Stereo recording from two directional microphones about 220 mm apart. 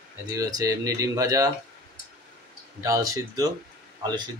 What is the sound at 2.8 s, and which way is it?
Speech, 15° right (ahead or behind).